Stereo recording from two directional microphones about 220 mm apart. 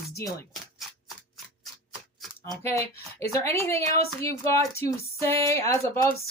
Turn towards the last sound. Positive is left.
turn(degrees=15)  # may be behind; listen again after turning